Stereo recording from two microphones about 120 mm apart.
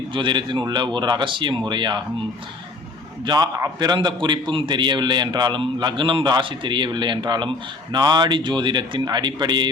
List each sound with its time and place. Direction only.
0.1 s a man's voice: 40° right (ahead or behind)
3.2 s a man's voice: 35° right (ahead or behind)